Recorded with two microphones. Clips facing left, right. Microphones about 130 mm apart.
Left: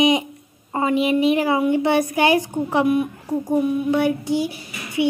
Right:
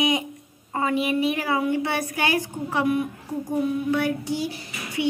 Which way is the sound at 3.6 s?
15° left (ahead or behind).